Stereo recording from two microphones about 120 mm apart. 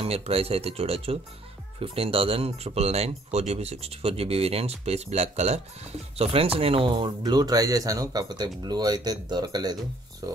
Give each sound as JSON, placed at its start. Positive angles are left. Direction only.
{"t": 0.0, "sound": "speech", "side_deg": -55}
{"t": 6.1, "sound": "speech", "side_deg": -50}